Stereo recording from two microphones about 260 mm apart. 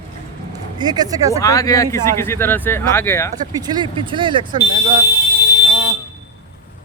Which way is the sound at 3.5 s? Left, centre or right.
Centre.